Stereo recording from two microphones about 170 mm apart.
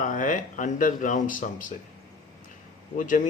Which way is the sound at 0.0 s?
50° left (ahead or behind).